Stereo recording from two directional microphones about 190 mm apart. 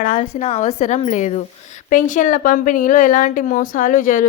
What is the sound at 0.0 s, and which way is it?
A woman's voice, 40° left (ahead or behind).